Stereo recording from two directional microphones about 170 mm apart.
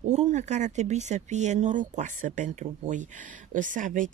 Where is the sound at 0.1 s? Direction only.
40° right (ahead or behind).